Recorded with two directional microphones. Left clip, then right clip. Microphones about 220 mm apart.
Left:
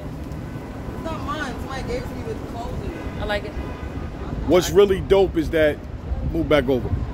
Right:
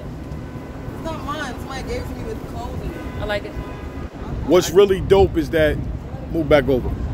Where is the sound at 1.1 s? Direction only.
50° right (ahead or behind).